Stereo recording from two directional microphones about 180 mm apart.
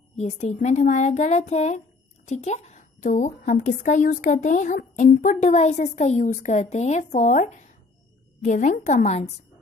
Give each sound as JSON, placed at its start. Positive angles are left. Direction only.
{"t": 0.1, "sound": "a woman's voice", "side_deg": 40}